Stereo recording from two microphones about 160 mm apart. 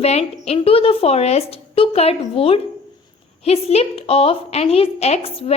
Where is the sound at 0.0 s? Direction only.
40° left (ahead or behind).